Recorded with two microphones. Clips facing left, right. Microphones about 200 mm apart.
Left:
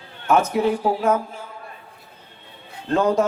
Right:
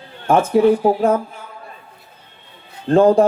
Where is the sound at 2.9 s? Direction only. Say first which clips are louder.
Right 7 dB; 50° right (ahead or behind).